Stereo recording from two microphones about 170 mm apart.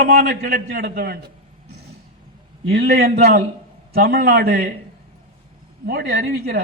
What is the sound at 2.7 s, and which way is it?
A man's voice, 65° right (ahead or behind).